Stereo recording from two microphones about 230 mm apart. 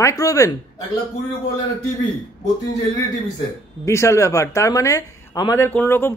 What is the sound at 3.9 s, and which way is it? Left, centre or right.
Speech, centre.